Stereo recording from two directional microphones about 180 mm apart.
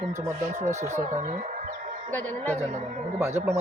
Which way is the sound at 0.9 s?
40° right (ahead or behind).